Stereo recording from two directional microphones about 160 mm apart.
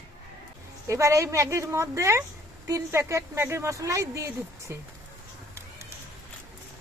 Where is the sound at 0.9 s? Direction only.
20° right (ahead or behind).